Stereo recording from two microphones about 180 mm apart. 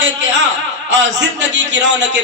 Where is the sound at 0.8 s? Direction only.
85° right.